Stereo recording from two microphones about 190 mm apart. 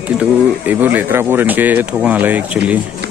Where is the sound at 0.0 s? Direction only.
10° right (ahead or behind).